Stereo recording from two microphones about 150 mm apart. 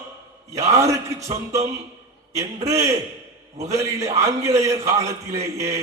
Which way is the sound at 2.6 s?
20° right (ahead or behind).